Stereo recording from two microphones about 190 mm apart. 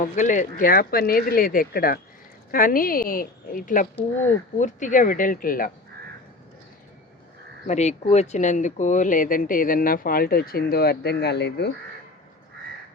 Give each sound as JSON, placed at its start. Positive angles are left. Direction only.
{"t": 0.0, "sound": "speech", "side_deg": 40}
{"t": 7.7, "sound": "speech", "side_deg": 35}